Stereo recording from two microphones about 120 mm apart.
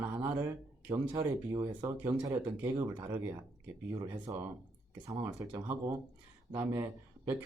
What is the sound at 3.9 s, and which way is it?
Speech, 40° right (ahead or behind).